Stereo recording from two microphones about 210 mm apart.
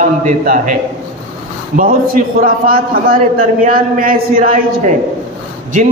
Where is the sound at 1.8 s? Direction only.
40° right (ahead or behind).